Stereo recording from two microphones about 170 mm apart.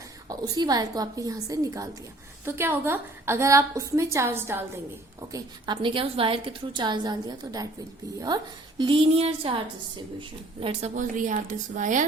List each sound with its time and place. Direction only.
0.3 s a woman's voice: 25° right (ahead or behind)
5.3 s a woman's voice: 25° right (ahead or behind); by 12.0 s 50° right (ahead or behind)